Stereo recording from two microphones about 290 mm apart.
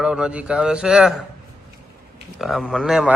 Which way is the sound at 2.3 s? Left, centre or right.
Centre.